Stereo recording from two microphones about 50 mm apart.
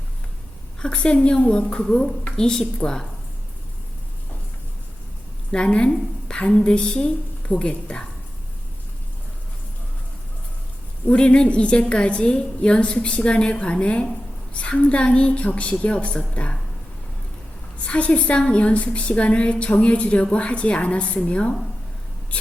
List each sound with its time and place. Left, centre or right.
0.8 s a woman's voice: centre
5.5 s a woman's voice: centre
11.0 s a woman's voice: left
17.7 s a woman's voice: left